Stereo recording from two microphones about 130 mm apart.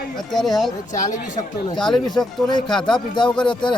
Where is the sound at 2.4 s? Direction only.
35° left (ahead or behind).